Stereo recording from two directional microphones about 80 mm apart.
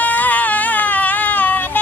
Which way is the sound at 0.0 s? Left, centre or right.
Centre.